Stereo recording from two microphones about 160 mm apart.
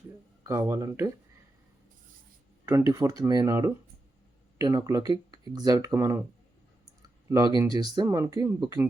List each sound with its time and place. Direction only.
0.4 s speech: 15° right (ahead or behind)
2.6 s speech: 15° right (ahead or behind)
7.3 s speech: 25° right (ahead or behind)